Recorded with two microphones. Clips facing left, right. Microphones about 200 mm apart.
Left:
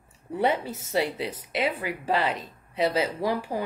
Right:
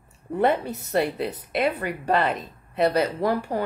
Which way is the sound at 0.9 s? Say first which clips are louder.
Right 3 dB; 50° right (ahead or behind).